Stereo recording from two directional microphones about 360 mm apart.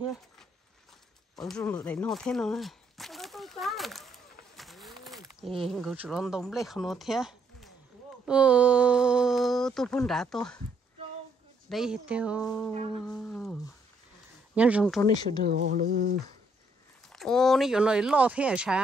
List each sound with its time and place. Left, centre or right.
1.3 s a sound: centre
8.3 s speech: centre
11.7 s speech: centre
15.0 s speech: centre
15.4 s speech: right
17.1 s speech: centre